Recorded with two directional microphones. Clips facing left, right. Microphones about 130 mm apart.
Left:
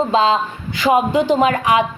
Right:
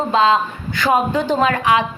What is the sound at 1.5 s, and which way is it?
Speech, 25° left (ahead or behind).